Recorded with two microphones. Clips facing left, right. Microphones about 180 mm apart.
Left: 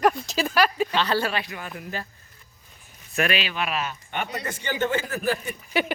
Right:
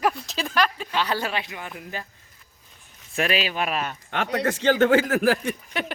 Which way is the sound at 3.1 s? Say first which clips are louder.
Right 1 dB; 30° right (ahead or behind).